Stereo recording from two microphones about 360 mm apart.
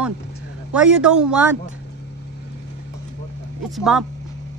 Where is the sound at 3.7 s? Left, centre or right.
Centre.